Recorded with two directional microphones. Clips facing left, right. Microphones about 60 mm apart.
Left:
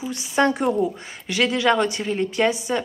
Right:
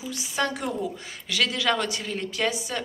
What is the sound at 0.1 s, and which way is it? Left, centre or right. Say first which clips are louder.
A woman's voice: left 8 dB; left.